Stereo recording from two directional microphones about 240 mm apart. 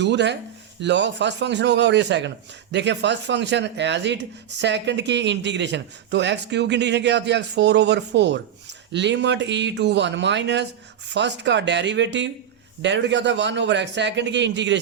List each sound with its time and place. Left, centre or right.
0.0 s speech: right